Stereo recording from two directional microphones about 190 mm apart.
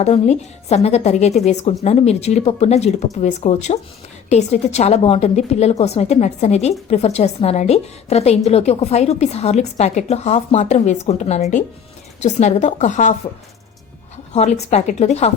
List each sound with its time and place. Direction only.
0.0 s a woman's voice: 35° left (ahead or behind)
14.3 s a woman's voice: 35° left (ahead or behind)